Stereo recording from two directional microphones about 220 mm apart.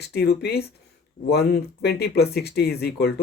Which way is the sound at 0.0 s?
50° left (ahead or behind).